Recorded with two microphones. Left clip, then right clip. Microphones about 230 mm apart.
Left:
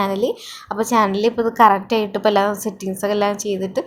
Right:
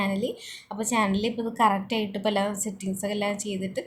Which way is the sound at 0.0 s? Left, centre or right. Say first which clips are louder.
Left 9 dB; left.